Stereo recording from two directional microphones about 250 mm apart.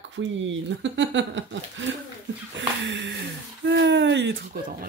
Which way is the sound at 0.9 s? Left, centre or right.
Right.